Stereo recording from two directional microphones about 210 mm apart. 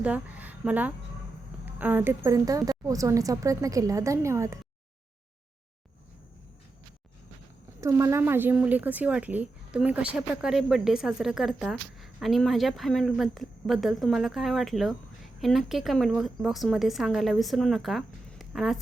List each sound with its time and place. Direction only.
0.0 s a woman's voice: 5° right (ahead or behind)
7.8 s a woman's voice: 15° right (ahead or behind)